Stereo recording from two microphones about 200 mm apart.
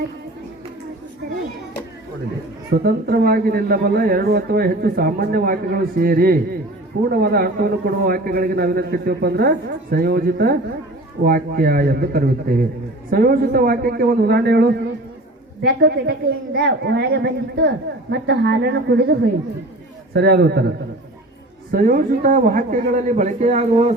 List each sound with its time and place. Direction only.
2.6 s a man's voice: 50° right (ahead or behind)
21.7 s a man's voice: 45° right (ahead or behind)